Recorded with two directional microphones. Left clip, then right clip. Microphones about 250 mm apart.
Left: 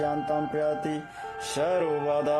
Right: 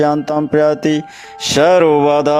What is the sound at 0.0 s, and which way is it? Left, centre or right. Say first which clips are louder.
Music: right 12 dB; right.